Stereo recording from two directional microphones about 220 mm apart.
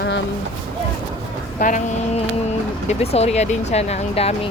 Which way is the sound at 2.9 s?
30° left (ahead or behind).